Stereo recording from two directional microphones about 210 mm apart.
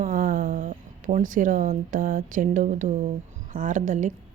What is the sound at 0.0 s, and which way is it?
Speech, 40° right (ahead or behind).